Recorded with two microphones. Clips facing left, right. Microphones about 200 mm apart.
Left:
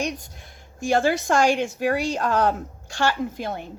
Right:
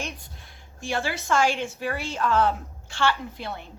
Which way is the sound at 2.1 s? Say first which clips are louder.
Left 1 dB; 45° left (ahead or behind).